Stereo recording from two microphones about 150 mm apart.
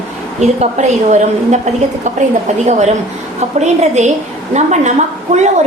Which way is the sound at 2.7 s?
50° right (ahead or behind).